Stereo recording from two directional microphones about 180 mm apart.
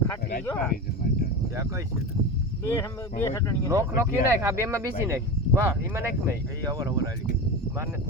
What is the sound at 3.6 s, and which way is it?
Speech, 20° right (ahead or behind).